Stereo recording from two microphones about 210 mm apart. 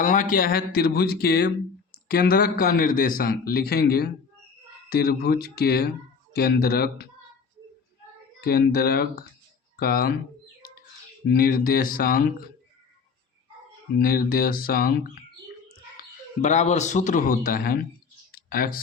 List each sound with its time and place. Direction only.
0.0 s a man's voice: 40° left (ahead or behind)
8.4 s a man's voice: 45° left (ahead or behind)
11.3 s a man's voice: 45° left (ahead or behind)
14.0 s a man's voice: 45° left (ahead or behind)
16.4 s a man's voice: 35° left (ahead or behind)
18.3 s clicking: 45° left (ahead or behind)